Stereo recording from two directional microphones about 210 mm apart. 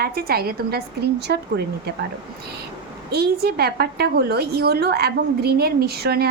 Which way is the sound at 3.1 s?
50° right (ahead or behind).